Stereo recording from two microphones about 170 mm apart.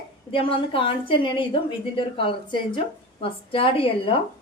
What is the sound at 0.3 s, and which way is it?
A woman's voice, 30° left (ahead or behind).